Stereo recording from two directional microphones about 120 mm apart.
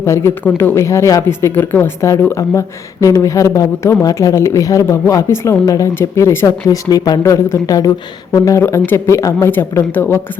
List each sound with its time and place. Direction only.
0.0 s speech: 25° left (ahead or behind)